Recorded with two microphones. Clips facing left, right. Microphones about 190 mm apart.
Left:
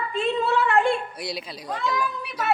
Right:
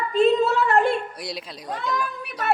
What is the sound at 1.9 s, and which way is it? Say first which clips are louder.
Speech: left 1 dB; 50° right (ahead or behind).